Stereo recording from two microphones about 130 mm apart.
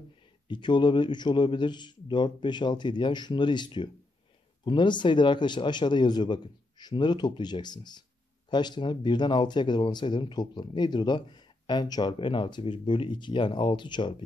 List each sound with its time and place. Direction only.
0.5 s speech: 35° left (ahead or behind)